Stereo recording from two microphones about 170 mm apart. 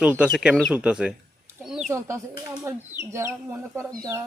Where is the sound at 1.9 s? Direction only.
15° right (ahead or behind).